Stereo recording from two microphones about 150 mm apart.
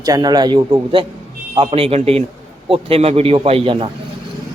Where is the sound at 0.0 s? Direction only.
25° right (ahead or behind).